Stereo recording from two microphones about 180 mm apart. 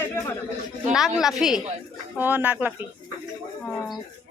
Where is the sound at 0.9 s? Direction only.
Centre (ahead or behind).